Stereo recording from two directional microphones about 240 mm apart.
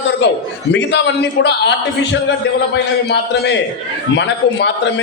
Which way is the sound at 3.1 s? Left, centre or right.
Left.